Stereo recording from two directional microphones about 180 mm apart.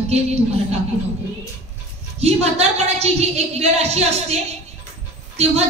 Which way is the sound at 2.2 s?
35° right (ahead or behind).